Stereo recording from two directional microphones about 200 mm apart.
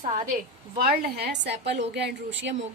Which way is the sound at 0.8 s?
50° right (ahead or behind).